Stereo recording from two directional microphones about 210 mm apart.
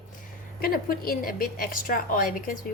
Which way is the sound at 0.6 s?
45° left (ahead or behind).